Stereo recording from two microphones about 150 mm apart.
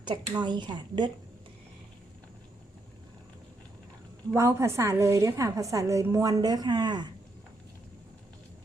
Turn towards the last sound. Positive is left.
turn(degrees=-30)  # may be behind; listen again after turning